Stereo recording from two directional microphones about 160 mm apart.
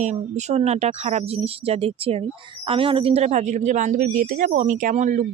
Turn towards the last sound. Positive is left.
turn(degrees=-55)  # may be behind; listen again after turning